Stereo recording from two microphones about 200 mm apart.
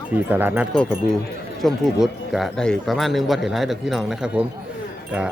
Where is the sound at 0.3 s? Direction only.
10° right (ahead or behind).